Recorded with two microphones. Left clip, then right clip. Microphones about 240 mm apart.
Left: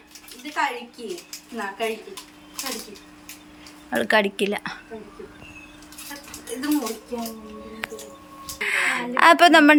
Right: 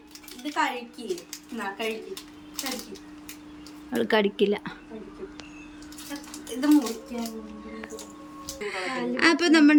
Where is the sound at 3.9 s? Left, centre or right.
Centre.